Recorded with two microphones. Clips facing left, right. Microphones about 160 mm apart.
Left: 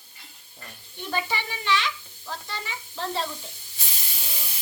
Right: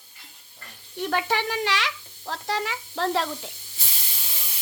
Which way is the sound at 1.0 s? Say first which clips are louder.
Right 5 dB; 75° right (ahead or behind).